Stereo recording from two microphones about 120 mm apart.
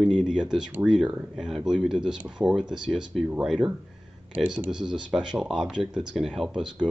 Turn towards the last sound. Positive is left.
turn(degrees=-5)  # may be behind; listen again after turning